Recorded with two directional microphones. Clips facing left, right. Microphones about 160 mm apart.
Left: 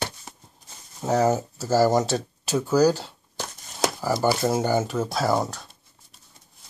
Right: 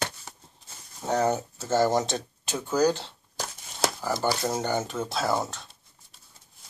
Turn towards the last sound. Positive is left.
turn(degrees=10)  # may be behind; listen again after turning